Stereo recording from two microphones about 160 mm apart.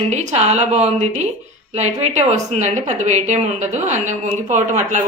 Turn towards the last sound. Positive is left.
turn(degrees=-45)  # may be behind; listen again after turning